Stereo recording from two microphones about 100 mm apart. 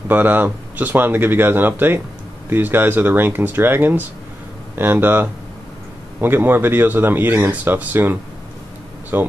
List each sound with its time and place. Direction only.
0.1 s speech: 20° right (ahead or behind)